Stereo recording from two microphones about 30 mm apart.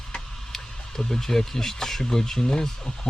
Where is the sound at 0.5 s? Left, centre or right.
Centre.